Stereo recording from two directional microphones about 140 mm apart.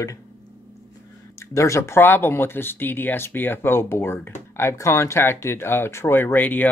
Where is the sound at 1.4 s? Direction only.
20° left (ahead or behind).